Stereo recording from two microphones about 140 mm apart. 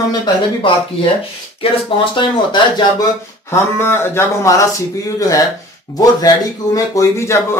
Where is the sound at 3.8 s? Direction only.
15° left (ahead or behind).